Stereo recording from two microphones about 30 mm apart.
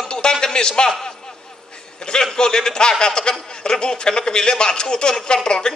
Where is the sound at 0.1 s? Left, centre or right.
Left.